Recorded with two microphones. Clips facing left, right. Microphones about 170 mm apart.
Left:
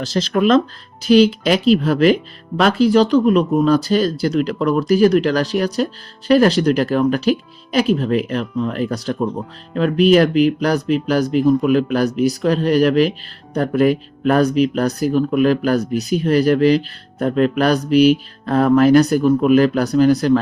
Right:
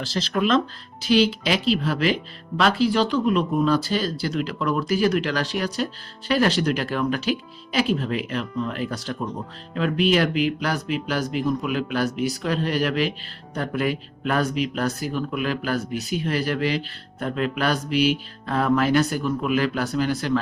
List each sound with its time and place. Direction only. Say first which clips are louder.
0.0 s speech: left 7 dB; 45° left (ahead or behind)